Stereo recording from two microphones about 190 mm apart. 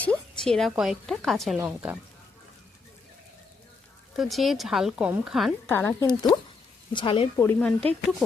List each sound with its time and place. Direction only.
0.0 s a woman's voice: 5° left (ahead or behind)
4.2 s speech: centre (ahead or behind)
5.6 s a woman's voice: 10° left (ahead or behind); by 7.3 s 25° left (ahead or behind)
7.3 s speech: 10° left (ahead or behind)